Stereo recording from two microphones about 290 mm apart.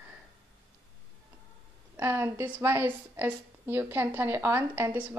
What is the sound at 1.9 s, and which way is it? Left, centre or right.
A woman's voice, centre.